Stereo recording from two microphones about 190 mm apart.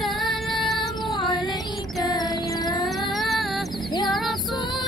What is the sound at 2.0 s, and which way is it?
Music, 20° left (ahead or behind).